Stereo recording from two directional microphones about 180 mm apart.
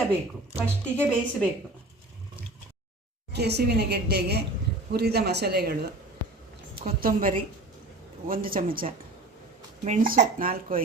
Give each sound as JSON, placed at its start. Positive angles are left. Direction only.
{"t": 0.6, "sound": "a woman's voice", "side_deg": 5}
{"t": 3.3, "sound": "a woman's voice", "side_deg": -65}
{"t": 7.0, "sound": "speech", "side_deg": -50}
{"t": 9.8, "sound": "speech", "side_deg": -45}